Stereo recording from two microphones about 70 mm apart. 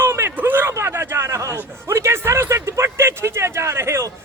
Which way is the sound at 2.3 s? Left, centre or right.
Right.